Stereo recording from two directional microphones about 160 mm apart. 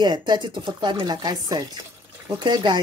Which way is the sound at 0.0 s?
30° right (ahead or behind).